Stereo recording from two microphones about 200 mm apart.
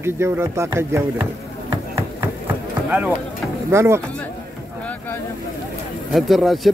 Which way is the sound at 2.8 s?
10° right (ahead or behind).